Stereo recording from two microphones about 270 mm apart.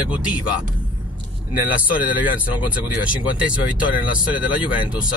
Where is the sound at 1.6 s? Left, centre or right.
Centre.